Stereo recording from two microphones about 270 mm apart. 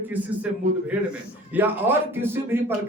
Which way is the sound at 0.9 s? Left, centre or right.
Centre.